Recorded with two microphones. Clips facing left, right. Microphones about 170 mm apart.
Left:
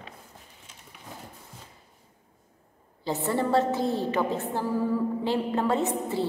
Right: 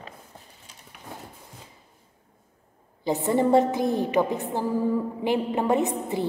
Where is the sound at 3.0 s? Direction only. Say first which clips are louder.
Right 5 dB; 15° right (ahead or behind).